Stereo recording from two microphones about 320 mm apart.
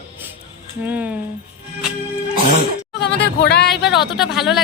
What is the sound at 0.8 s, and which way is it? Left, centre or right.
Speech, centre.